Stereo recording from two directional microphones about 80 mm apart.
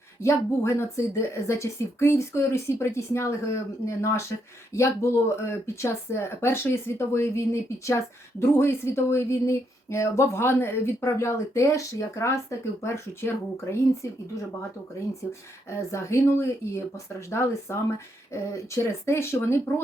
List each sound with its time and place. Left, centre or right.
0.2 s speech: left
15.9 s speech: left